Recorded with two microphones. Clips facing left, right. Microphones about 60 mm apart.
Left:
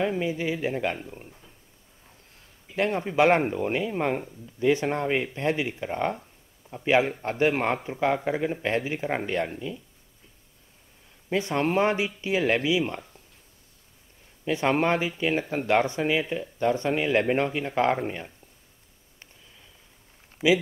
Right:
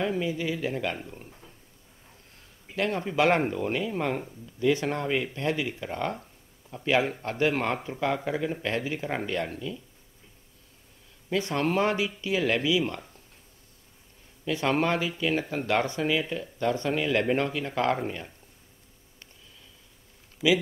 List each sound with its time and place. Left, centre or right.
0.2 s speech: left
0.9 s speech: centre
2.7 s speech: left
11.2 s speech: left
14.4 s speech: left
20.4 s speech: left